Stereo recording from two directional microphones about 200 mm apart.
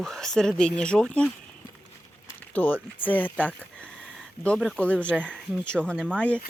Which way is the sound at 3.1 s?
10° left (ahead or behind).